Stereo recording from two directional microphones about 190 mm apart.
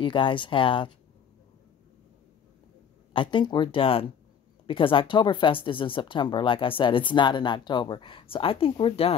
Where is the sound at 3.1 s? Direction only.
25° left (ahead or behind).